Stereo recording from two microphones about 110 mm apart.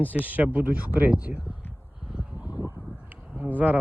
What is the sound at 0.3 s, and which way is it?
Speech, 15° right (ahead or behind).